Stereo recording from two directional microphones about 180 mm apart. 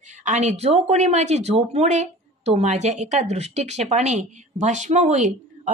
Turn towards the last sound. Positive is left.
turn(degrees=-40)  # may be behind; listen again after turning